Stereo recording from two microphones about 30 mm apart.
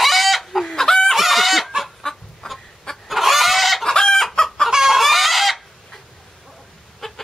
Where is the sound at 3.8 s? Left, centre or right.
Centre.